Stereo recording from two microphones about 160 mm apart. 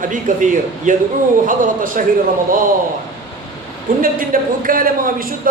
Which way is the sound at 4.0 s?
60° right (ahead or behind).